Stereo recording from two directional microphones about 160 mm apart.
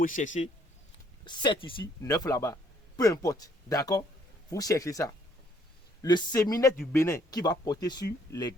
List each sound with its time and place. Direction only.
0.0 s a man's voice: 55° left (ahead or behind)
1.2 s a man's voice: 30° left (ahead or behind)